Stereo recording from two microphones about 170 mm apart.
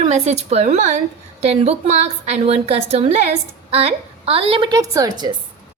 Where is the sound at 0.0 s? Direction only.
40° right (ahead or behind); by 5.3 s 25° right (ahead or behind).